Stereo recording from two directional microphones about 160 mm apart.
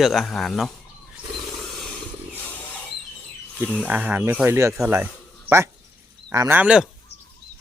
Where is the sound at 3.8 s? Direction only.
10° right (ahead or behind).